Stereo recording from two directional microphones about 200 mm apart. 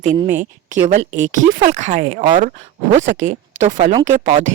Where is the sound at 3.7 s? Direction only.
25° right (ahead or behind).